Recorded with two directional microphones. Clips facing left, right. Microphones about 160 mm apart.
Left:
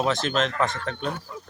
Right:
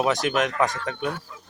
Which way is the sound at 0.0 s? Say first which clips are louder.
Right 1 dB; 15° right (ahead or behind).